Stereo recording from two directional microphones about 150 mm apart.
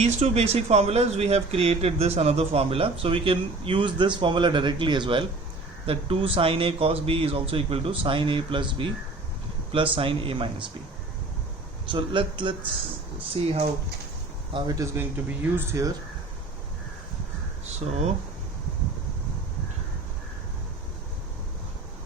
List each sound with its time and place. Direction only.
0.0 s speech: 45° right (ahead or behind)
11.9 s speech: 35° right (ahead or behind)
14.5 s speech: 25° right (ahead or behind)
15.3 s speech: 15° right (ahead or behind)